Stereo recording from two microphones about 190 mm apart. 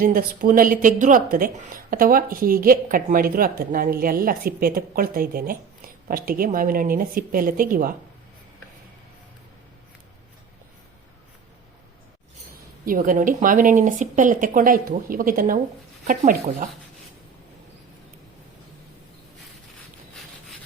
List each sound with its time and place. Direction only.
0.0 s speech: 50° right (ahead or behind)
12.8 s speech: 45° right (ahead or behind)